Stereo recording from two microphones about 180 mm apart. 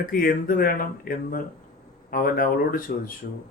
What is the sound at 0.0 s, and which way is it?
Speech, 55° left (ahead or behind).